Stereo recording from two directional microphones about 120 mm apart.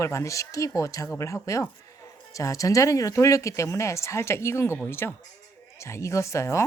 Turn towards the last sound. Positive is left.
turn(degrees=25)  # may be behind; listen again after turning